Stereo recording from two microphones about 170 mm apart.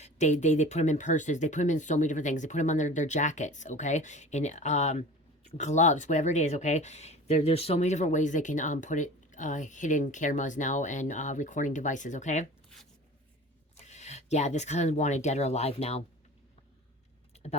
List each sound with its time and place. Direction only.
0.0 s speech: 45° left (ahead or behind)
13.8 s speech: 40° left (ahead or behind)
17.3 s a sound: 35° left (ahead or behind)